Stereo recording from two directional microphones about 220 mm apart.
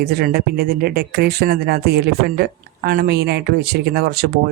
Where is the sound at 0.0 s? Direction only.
45° right (ahead or behind).